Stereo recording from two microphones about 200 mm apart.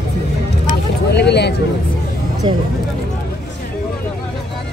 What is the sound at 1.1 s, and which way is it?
Speech, 55° left (ahead or behind).